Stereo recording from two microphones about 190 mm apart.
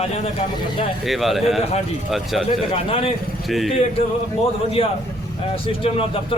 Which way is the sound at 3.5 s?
Centre (ahead or behind).